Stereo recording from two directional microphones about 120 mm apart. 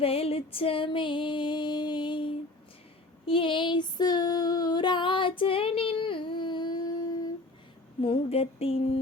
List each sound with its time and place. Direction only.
0.0 s music: 55° left (ahead or behind)
3.2 s female singing: 45° left (ahead or behind)
8.0 s music: 55° left (ahead or behind)